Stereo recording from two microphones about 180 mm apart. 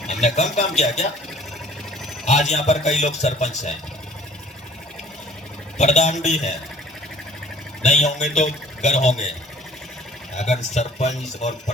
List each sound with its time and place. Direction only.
0.1 s a man's voice: 40° left (ahead or behind)
2.2 s a man's voice: 40° left (ahead or behind)
5.7 s a man's voice: 40° left (ahead or behind)
7.8 s a man's voice: 40° left (ahead or behind)
10.3 s a man's voice: 40° left (ahead or behind)